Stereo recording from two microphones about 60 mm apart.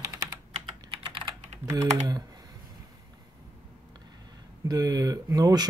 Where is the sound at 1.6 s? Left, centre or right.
Right.